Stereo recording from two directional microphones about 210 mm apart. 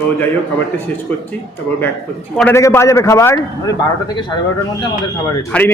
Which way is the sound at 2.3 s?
10° left (ahead or behind).